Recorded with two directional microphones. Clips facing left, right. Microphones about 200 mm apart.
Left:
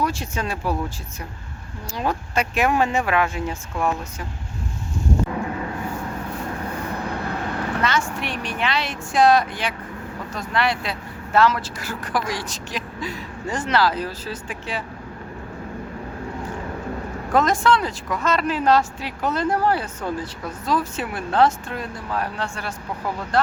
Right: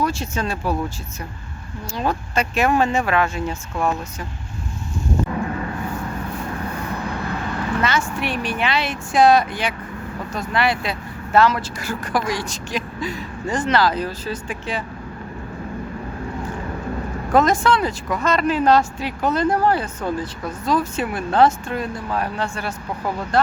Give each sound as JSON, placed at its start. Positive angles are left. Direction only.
{"t": 0.0, "sound": "speech", "side_deg": 15}
{"t": 2.0, "sound": "speech", "side_deg": 10}
{"t": 7.1, "sound": "vehicle", "side_deg": 60}
{"t": 7.8, "sound": "speech", "side_deg": -5}
{"t": 17.3, "sound": "speech", "side_deg": 0}